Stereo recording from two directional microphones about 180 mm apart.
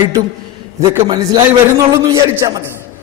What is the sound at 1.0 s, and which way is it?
A man's voice, 25° right (ahead or behind).